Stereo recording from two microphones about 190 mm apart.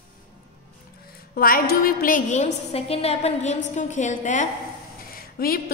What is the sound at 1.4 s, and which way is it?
A woman's voice, 50° left (ahead or behind).